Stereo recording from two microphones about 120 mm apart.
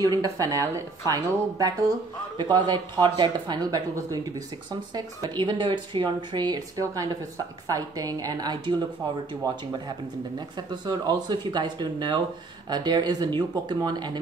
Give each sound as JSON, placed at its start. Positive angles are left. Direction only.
{"t": 0.0, "sound": "speech", "side_deg": -30}
{"t": 5.3, "sound": "speech", "side_deg": -40}
{"t": 9.8, "sound": "speech", "side_deg": -40}